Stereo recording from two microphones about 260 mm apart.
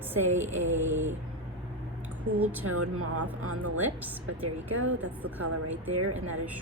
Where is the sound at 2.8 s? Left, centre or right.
Right.